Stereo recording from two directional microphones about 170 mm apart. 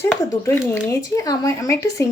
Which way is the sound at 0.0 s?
15° left (ahead or behind).